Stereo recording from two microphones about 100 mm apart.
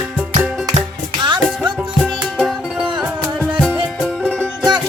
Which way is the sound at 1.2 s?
50° right (ahead or behind).